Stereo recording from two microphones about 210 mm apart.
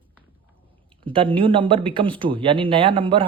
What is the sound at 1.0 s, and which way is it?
Speech, 25° right (ahead or behind).